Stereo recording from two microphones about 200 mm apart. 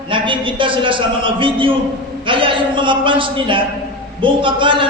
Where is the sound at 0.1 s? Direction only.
25° right (ahead or behind).